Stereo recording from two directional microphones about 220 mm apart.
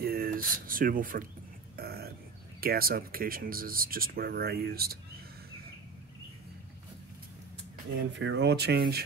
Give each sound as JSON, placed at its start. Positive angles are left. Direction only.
{"t": 0.0, "sound": "speech", "side_deg": -45}
{"t": 1.8, "sound": "a sound", "side_deg": -45}
{"t": 2.6, "sound": "speech", "side_deg": -45}
{"t": 8.1, "sound": "speech", "side_deg": -55}